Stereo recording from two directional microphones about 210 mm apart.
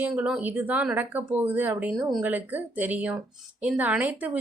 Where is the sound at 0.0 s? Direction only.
5° right (ahead or behind).